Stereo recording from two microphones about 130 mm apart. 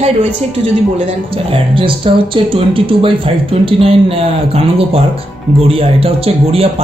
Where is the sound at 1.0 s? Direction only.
45° right (ahead or behind).